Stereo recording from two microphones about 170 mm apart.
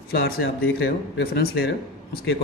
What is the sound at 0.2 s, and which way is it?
A man's voice, 70° left (ahead or behind).